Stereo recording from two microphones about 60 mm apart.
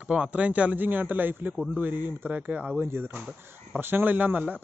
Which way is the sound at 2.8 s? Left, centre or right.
Right.